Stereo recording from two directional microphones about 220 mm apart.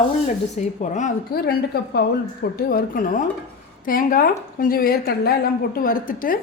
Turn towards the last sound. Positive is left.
turn(degrees=40)  # may be behind; listen again after turning